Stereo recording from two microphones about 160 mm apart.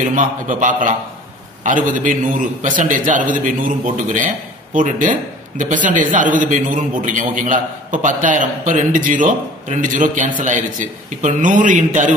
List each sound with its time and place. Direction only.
0.0 s a man's voice: 55° right (ahead or behind)